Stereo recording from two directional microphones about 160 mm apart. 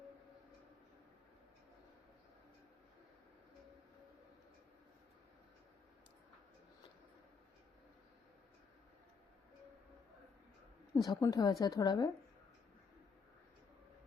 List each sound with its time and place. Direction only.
11.0 s a woman's voice: 25° left (ahead or behind)